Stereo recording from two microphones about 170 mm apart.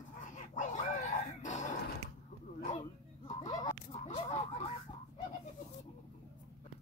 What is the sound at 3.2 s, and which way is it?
Fowl, 45° left (ahead or behind).